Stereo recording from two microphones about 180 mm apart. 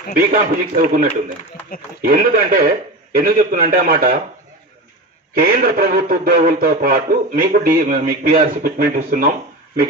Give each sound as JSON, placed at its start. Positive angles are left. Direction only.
{"t": 0.2, "sound": "a man's voice", "side_deg": -50}
{"t": 5.3, "sound": "a man's voice", "side_deg": -55}